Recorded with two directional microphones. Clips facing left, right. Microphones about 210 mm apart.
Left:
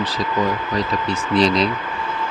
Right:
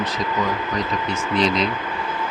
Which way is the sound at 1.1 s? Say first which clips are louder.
Left 4 dB; 35° left (ahead or behind).